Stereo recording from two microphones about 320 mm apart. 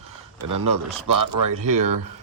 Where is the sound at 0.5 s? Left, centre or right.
Right.